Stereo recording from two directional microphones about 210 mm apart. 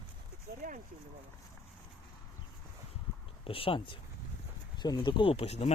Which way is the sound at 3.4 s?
25° left (ahead or behind).